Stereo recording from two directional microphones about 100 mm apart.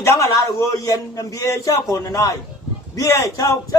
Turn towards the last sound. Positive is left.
turn(degrees=35)  # may be behind; listen again after turning